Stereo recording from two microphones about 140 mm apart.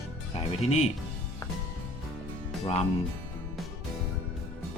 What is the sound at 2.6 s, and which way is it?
Speech, 45° left (ahead or behind).